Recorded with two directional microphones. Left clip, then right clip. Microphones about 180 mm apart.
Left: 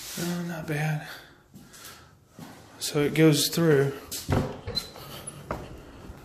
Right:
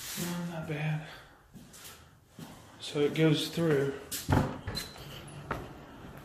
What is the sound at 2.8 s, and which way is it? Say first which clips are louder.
Speech: left 6 dB; 55° left (ahead or behind).